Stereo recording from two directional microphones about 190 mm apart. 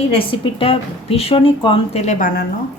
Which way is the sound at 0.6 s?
30° left (ahead or behind).